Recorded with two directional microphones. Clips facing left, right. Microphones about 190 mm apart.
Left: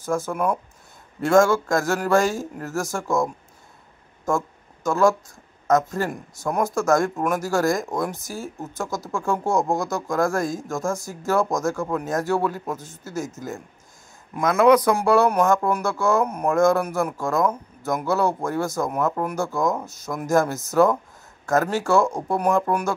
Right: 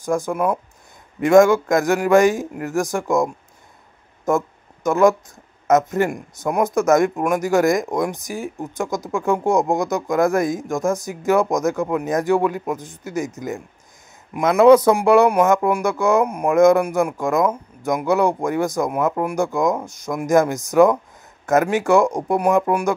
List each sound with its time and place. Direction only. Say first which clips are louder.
0.0 s speech: right 3 dB; 15° right (ahead or behind)